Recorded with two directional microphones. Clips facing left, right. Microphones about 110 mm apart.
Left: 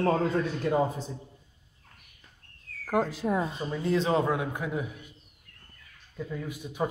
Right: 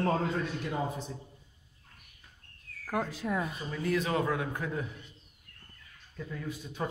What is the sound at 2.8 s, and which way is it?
Speech, 25° left (ahead or behind).